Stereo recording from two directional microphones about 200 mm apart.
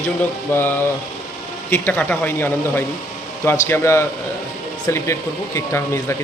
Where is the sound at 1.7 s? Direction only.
10° left (ahead or behind).